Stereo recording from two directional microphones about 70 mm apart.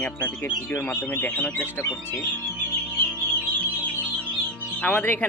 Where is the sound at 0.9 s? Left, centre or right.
Left.